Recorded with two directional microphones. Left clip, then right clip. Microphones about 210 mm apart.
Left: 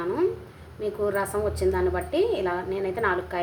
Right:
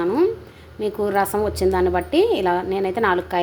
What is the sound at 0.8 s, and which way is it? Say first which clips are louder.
A woman's voice: right 6 dB; 35° right (ahead or behind).